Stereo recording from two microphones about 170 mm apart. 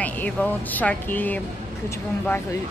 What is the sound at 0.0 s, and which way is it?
A woman's voice, 10° left (ahead or behind).